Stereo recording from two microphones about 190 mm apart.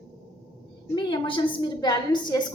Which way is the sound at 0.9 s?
25° left (ahead or behind).